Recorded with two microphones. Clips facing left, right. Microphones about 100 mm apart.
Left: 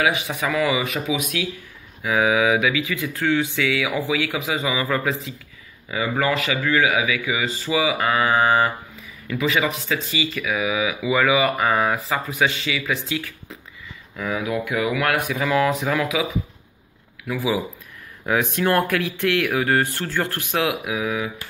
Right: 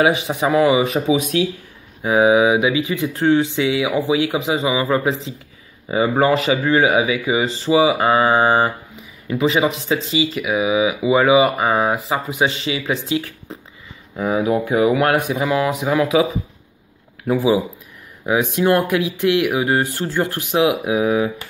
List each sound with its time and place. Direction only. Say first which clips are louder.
0.0 s speech: right 5 dB; 25° right (ahead or behind)
5.9 s speech: right 6 dB; 30° right (ahead or behind)
17.3 s speech: right 7 dB; 25° right (ahead or behind)
18.2 s speech: right 4 dB; 15° right (ahead or behind); by 21.3 s 30° right (ahead or behind)